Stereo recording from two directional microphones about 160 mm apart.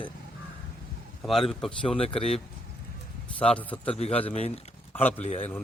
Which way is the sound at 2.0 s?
35° left (ahead or behind).